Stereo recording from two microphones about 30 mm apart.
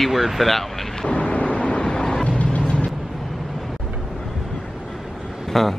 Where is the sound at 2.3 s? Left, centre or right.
Left.